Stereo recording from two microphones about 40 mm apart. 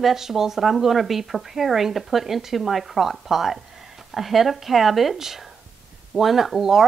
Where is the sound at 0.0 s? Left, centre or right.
Centre.